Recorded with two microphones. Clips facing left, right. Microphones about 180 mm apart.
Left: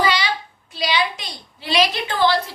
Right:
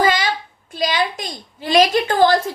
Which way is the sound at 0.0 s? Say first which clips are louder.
Right 3 dB; 45° right (ahead or behind).